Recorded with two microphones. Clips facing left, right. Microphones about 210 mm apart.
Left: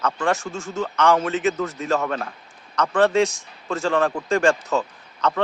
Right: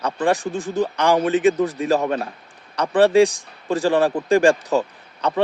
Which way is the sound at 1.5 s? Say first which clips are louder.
Right 4 dB; 35° right (ahead or behind).